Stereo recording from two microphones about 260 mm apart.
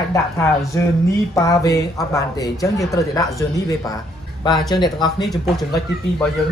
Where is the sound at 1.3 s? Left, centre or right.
Centre.